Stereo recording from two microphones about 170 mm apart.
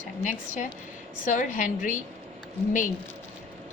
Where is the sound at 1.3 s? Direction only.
50° left (ahead or behind).